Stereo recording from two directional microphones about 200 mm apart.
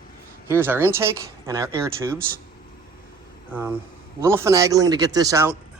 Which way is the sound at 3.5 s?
10° right (ahead or behind).